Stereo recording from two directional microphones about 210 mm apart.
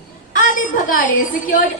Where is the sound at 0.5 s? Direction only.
40° left (ahead or behind).